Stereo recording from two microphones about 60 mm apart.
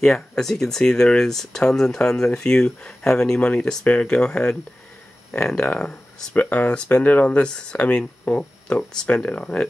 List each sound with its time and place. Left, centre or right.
0.0 s speech: centre
6.5 s speech: left